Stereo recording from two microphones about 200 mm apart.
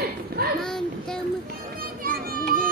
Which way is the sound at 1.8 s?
45° right (ahead or behind).